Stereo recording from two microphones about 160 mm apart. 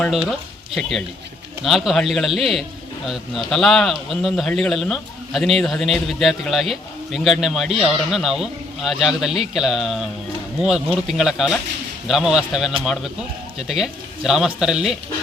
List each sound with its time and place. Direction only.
0.0 s speech: centre (ahead or behind)